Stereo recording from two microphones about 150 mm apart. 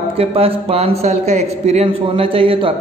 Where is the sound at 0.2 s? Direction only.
40° right (ahead or behind).